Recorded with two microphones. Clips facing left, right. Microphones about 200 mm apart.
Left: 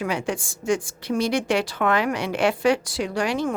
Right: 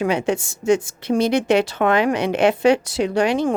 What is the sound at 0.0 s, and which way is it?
Speech, 25° right (ahead or behind).